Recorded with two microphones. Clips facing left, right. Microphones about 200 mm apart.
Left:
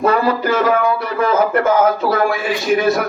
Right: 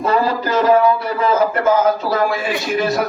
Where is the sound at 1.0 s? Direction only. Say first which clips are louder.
Even; 55° left (ahead or behind).